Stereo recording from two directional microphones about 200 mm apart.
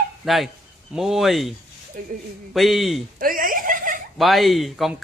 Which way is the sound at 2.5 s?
Centre (ahead or behind).